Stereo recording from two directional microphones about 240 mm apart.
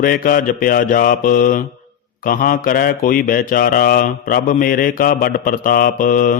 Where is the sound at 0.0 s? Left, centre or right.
Left.